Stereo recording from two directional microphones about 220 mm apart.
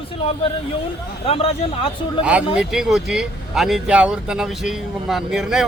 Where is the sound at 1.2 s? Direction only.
25° left (ahead or behind).